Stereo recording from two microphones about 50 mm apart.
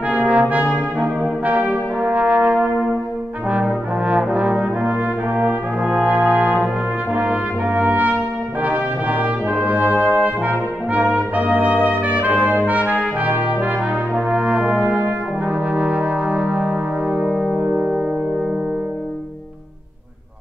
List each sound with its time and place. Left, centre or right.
0.2 s brass instrument: right
17.6 s music: centre